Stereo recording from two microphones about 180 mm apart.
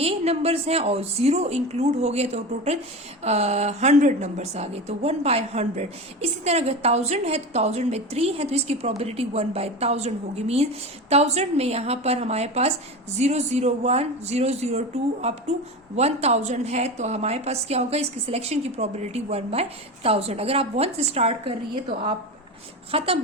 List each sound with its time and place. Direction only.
0.0 s a woman's voice: 35° right (ahead or behind)